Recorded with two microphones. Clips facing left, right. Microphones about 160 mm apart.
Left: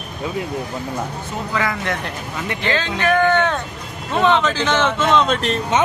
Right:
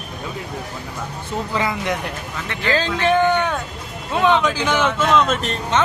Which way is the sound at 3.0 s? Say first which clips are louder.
Left 2 dB; 25° right (ahead or behind).